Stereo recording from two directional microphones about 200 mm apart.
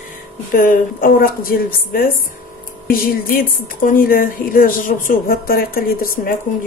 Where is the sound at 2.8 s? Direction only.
45° left (ahead or behind).